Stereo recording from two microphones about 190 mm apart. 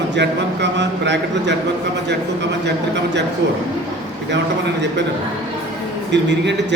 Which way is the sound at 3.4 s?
65° right (ahead or behind).